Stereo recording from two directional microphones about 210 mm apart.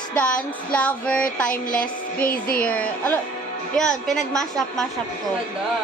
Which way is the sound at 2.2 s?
45° left (ahead or behind).